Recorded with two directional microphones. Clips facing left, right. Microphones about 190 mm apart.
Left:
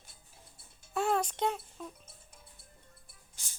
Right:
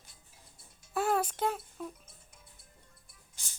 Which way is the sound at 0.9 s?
5° right (ahead or behind).